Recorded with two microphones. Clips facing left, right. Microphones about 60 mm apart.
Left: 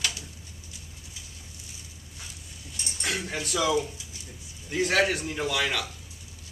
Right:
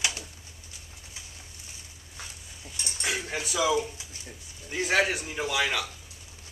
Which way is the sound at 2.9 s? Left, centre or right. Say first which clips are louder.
Even; centre.